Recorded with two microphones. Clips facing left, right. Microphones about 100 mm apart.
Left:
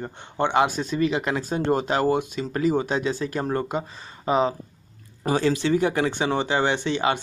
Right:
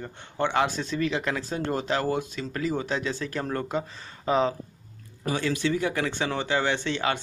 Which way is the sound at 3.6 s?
10° left (ahead or behind).